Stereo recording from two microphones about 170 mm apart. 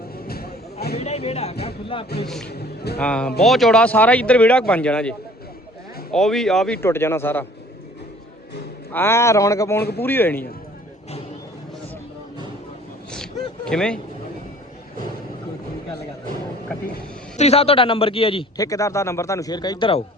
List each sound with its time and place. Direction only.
0.3 s a sound: 65° left (ahead or behind)
0.9 s speech: 35° left (ahead or behind)
2.2 s speech: centre (ahead or behind)
2.5 s speech: 70° left (ahead or behind)
3.0 s speech: 5° left (ahead or behind)
6.8 s speech: 15° left (ahead or behind)
8.9 s speech: 15° left (ahead or behind)
13.1 s a sound: 5° left (ahead or behind)
13.7 s speech: 5° left (ahead or behind)
17.3 s speech: 40° left (ahead or behind)
18.5 s speech: 20° left (ahead or behind)